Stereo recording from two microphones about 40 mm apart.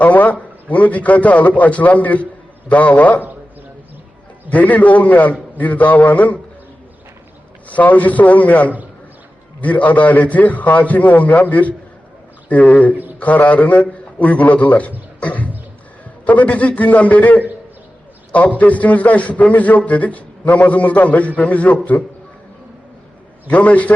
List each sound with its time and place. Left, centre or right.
0.0 s a man's voice: left
4.4 s a man's voice: left
7.7 s a man's voice: left
15.2 s a sound: left
16.2 s a man's voice: left
23.5 s a man's voice: left